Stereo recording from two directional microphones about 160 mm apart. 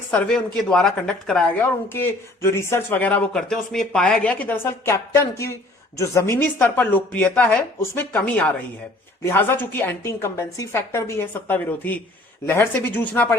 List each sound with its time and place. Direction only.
0.1 s a woman's voice: 5° left (ahead or behind)